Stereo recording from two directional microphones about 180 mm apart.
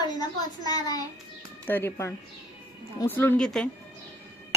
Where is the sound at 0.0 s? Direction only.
20° left (ahead or behind).